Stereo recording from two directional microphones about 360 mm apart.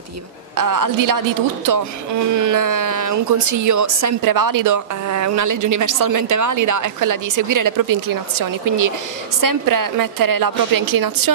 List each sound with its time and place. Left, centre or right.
0.6 s speech: right